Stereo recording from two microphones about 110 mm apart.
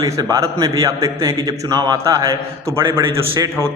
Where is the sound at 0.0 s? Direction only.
30° right (ahead or behind).